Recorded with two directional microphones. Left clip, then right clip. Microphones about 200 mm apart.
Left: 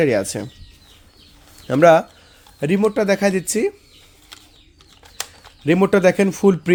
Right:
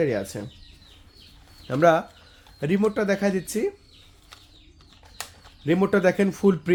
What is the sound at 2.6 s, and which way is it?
Speech, 30° left (ahead or behind).